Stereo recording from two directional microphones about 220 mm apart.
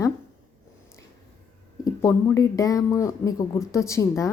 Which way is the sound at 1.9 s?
15° left (ahead or behind).